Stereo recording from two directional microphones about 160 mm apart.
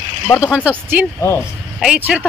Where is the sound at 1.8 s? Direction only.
5° right (ahead or behind).